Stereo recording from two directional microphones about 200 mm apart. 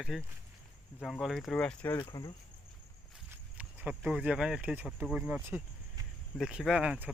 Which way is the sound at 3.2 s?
5° right (ahead or behind).